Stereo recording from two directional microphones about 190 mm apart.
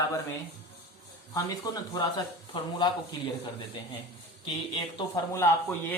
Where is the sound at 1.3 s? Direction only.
20° left (ahead or behind).